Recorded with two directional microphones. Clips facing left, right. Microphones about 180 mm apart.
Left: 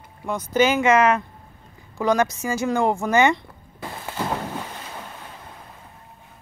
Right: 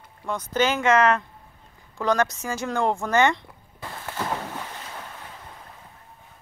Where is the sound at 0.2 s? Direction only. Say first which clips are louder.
Left 4 dB; 10° left (ahead or behind).